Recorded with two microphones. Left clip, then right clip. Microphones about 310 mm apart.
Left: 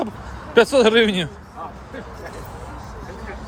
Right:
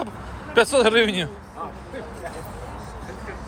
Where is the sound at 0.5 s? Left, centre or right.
Centre.